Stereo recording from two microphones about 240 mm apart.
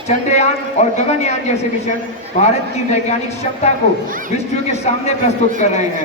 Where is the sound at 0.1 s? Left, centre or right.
Left.